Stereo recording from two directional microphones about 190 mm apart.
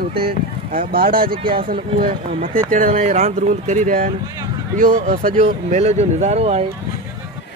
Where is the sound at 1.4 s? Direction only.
25° right (ahead or behind).